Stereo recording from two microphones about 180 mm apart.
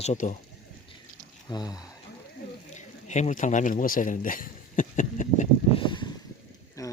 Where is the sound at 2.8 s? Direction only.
40° left (ahead or behind).